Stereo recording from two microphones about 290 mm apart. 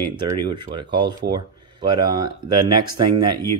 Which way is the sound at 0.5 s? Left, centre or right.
Centre.